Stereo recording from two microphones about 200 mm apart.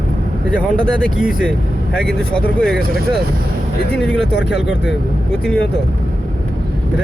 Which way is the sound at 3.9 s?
5° left (ahead or behind).